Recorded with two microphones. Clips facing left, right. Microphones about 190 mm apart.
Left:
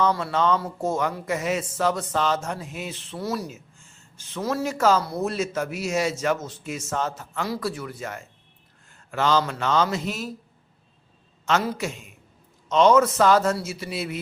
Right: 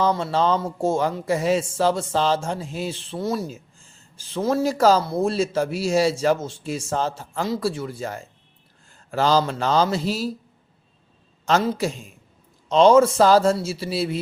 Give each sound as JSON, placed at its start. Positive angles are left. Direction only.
{"t": 0.0, "sound": "a man's voice", "side_deg": -30}
{"t": 11.4, "sound": "a man's voice", "side_deg": -30}